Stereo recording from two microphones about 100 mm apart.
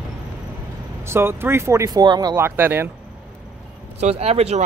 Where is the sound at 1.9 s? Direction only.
40° right (ahead or behind).